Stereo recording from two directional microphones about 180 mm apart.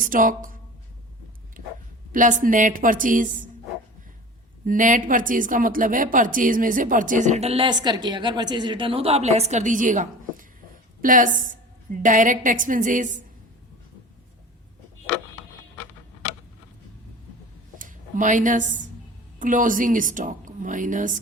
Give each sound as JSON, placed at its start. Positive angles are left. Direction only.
{"t": 0.0, "sound": "speech", "side_deg": -50}
{"t": 2.1, "sound": "speech", "side_deg": -45}
{"t": 4.6, "sound": "speech", "side_deg": -50}
{"t": 17.7, "sound": "a woman's voice", "side_deg": -50}